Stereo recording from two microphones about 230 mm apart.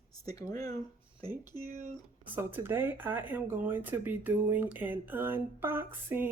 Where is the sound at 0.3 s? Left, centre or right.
Centre.